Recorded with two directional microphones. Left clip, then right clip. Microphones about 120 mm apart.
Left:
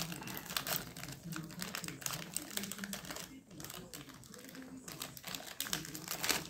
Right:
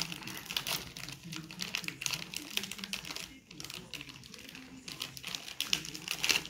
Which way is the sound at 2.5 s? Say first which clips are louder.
Right 7 dB; 25° left (ahead or behind).